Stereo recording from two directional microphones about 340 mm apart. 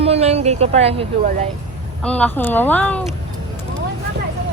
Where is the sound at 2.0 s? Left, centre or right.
Centre.